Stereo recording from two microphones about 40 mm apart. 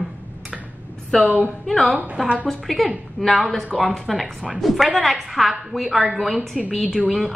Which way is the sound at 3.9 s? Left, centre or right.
Centre.